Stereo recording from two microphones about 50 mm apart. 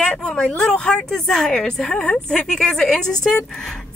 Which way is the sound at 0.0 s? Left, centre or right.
Left.